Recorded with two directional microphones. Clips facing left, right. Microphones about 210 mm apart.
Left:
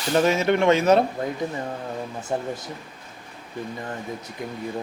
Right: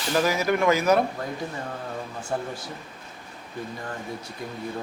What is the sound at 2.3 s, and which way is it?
Speech, 20° left (ahead or behind).